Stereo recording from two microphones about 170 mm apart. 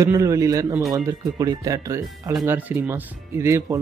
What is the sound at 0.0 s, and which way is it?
Speech, 20° right (ahead or behind).